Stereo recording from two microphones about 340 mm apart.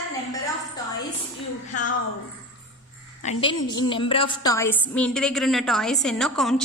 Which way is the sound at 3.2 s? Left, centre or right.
Centre.